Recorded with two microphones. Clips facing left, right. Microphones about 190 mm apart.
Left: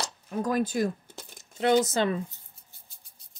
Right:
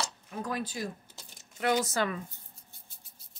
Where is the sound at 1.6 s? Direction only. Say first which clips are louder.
Left 5 dB; 25° left (ahead or behind).